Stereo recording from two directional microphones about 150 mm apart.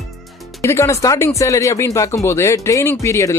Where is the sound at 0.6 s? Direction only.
20° left (ahead or behind).